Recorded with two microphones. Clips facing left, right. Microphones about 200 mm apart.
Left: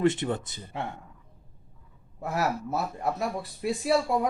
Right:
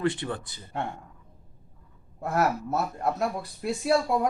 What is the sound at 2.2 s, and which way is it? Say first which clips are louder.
Speech: right 3 dB; centre (ahead or behind).